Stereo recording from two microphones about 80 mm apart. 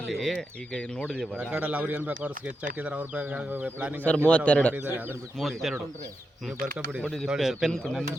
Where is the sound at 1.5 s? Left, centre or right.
Centre.